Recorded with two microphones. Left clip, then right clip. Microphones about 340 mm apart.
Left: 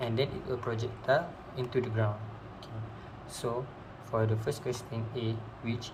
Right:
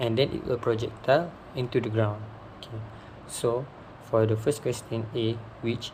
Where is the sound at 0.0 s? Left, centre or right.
Right.